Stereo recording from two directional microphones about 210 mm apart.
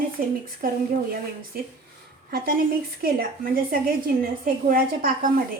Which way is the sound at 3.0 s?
45° right (ahead or behind).